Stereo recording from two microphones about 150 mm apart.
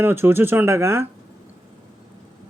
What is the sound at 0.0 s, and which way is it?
Speech, 15° right (ahead or behind).